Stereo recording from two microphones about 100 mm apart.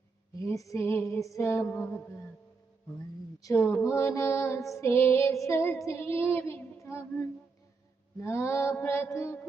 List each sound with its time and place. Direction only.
0.4 s female singing: 30° left (ahead or behind)
3.4 s female singing: 25° left (ahead or behind)